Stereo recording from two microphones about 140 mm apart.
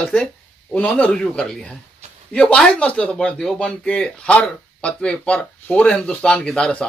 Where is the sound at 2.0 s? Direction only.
50° right (ahead or behind).